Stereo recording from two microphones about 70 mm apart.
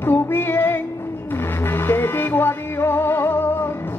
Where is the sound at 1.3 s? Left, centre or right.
Left.